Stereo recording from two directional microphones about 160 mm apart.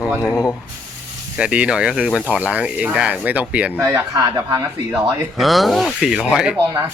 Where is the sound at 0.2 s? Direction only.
15° left (ahead or behind).